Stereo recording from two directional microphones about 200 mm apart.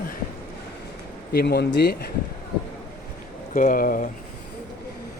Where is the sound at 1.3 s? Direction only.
55° left (ahead or behind).